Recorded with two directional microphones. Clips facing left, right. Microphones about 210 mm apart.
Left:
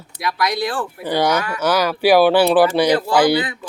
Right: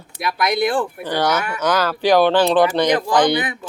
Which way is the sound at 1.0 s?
10° left (ahead or behind).